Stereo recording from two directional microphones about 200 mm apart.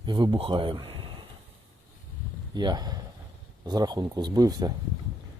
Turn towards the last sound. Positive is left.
turn(degrees=-20)  # may be behind; listen again after turning